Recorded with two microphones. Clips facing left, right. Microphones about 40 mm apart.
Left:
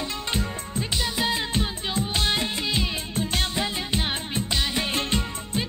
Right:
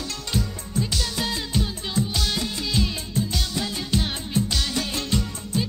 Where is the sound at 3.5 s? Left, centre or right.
Left.